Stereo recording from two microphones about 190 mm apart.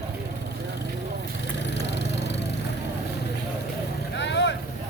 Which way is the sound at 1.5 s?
65° left (ahead or behind).